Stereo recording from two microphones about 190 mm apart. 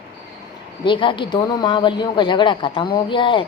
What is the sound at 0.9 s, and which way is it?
A woman's voice, 25° left (ahead or behind).